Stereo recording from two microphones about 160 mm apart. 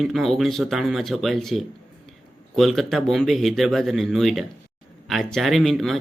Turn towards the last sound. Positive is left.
turn(degrees=0)  # may be behind; listen again after turning